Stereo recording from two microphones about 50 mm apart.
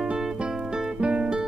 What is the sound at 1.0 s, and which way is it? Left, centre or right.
Guitar, centre.